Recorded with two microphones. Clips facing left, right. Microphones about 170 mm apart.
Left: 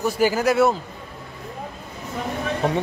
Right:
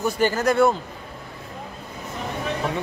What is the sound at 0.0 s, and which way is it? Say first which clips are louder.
Speech: left 1 dB; 10° left (ahead or behind).